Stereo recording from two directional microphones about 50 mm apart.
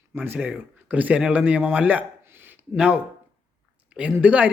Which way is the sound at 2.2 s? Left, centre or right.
Right.